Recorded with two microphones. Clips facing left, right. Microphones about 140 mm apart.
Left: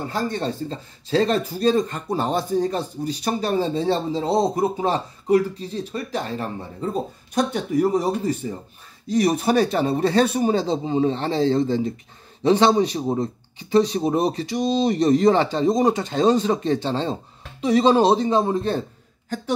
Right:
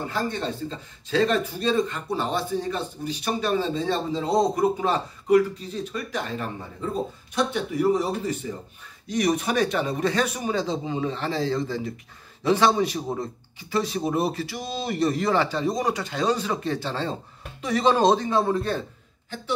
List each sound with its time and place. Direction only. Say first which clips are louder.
0.1 s speech: left 5 dB; 40° left (ahead or behind); by 18.8 s 20° left (ahead or behind)